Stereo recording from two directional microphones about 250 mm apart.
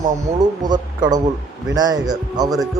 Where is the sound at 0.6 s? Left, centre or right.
Centre.